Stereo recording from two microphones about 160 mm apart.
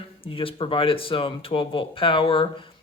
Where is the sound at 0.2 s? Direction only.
35° left (ahead or behind).